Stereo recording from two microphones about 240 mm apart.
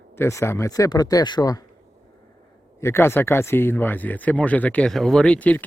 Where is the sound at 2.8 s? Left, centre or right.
Centre.